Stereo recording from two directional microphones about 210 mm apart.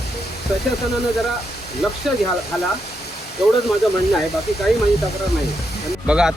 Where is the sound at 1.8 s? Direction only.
Centre (ahead or behind).